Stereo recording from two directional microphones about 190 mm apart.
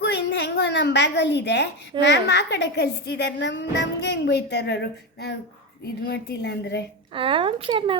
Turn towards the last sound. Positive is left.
turn(degrees=-30)  # may be behind; listen again after turning